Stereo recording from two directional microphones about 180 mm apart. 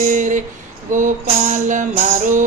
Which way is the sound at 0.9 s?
45° right (ahead or behind).